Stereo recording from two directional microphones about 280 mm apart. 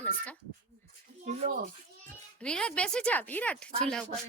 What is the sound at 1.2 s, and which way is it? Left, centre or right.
Speech, right.